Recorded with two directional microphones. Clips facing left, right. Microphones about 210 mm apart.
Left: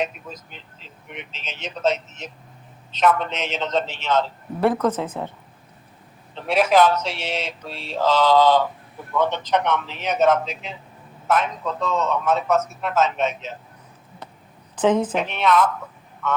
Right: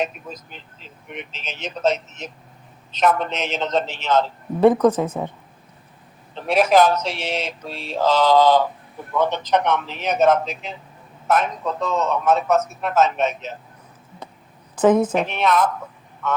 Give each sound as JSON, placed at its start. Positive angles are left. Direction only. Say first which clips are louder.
{"t": 1.1, "sound": "speech", "louder": "right 3 dB", "side_deg": -45}
{"t": 4.6, "sound": "speech", "louder": "right 5 dB", "side_deg": -15}
{"t": 6.3, "sound": "a man's voice", "louder": "right 2 dB", "side_deg": -40}
{"t": 14.8, "sound": "speech", "louder": "right 3 dB", "side_deg": -10}
{"t": 15.3, "sound": "speech", "louder": "even", "side_deg": -40}